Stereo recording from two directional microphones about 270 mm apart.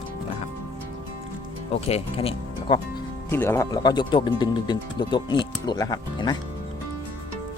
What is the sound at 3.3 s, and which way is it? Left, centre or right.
Speech, centre.